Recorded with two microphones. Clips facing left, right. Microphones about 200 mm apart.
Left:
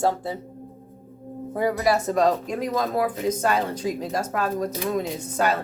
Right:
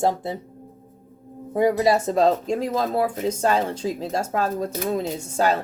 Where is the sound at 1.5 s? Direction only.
25° right (ahead or behind).